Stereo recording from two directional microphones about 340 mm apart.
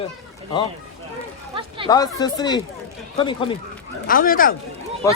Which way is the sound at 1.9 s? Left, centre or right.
Centre.